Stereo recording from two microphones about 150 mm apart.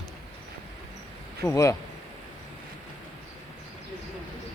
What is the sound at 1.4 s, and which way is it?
Speech, 20° left (ahead or behind).